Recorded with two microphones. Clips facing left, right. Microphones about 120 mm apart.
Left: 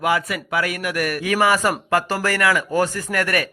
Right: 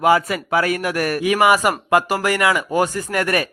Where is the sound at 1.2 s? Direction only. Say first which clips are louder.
Right 3 dB; 20° right (ahead or behind).